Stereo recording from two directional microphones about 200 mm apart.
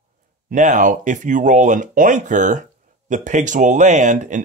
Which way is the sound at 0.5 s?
40° right (ahead or behind).